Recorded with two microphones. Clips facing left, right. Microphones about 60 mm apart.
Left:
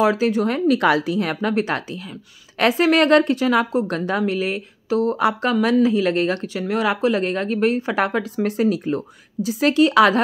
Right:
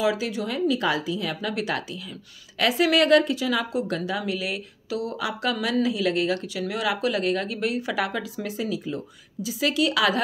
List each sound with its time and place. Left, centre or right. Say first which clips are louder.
0.0 s a woman's voice: left 7 dB; left